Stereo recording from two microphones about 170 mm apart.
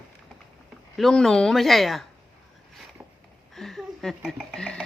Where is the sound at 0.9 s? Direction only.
Centre (ahead or behind).